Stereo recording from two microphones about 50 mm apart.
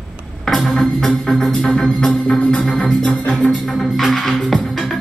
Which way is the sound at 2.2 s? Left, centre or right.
Left.